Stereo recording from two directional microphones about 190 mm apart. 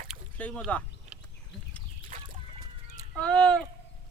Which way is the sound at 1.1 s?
5° right (ahead or behind).